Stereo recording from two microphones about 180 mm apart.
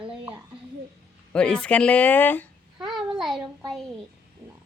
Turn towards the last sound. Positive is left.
turn(degrees=0)  # may be behind; listen again after turning